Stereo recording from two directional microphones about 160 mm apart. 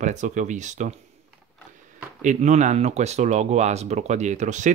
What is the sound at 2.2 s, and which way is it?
Speech, 50° right (ahead or behind).